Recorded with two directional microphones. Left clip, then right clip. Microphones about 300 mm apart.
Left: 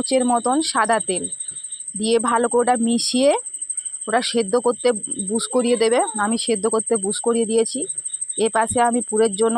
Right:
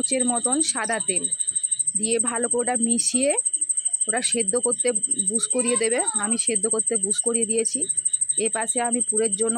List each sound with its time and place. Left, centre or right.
0.1 s speech: centre